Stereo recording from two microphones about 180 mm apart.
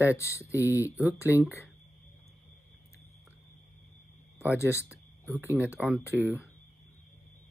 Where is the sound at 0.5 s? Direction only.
10° right (ahead or behind).